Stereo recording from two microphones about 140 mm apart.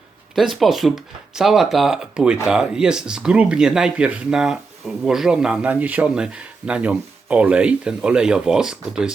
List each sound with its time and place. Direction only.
0.3 s speech: centre (ahead or behind)